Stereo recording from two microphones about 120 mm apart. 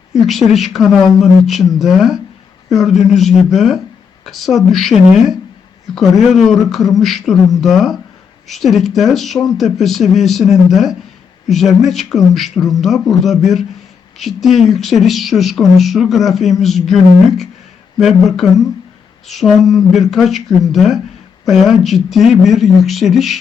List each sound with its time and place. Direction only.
0.1 s speech: centre (ahead or behind)